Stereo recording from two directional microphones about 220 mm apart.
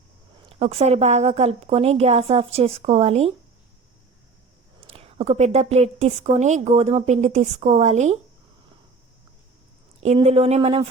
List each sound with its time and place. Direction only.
0.4 s a woman's voice: 25° right (ahead or behind)
4.9 s a woman's voice: 25° right (ahead or behind)
10.0 s a woman's voice: 30° right (ahead or behind)